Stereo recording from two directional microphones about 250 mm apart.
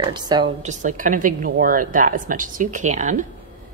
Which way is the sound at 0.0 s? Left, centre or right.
Centre.